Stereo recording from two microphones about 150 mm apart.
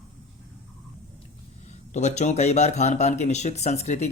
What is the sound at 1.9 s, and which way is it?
Speech, 50° left (ahead or behind).